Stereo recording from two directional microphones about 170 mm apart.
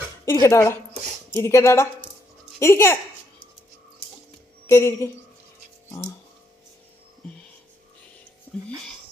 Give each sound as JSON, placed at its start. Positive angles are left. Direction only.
{"t": 0.3, "sound": "speech", "side_deg": 15}
{"t": 4.6, "sound": "speech", "side_deg": 15}
{"t": 8.5, "sound": "music", "side_deg": 10}